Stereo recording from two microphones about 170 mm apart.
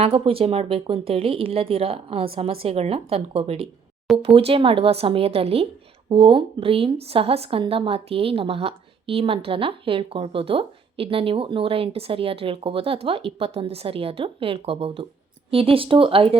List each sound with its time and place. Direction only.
0.0 s a woman's voice: 35° right (ahead or behind)